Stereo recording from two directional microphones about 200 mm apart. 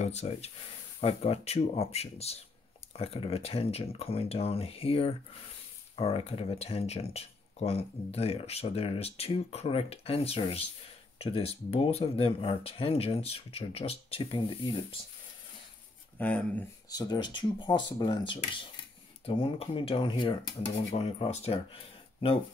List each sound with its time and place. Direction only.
0.0 s speech: 35° left (ahead or behind)
16.2 s speech: 5° left (ahead or behind)
16.9 s speech: 20° left (ahead or behind)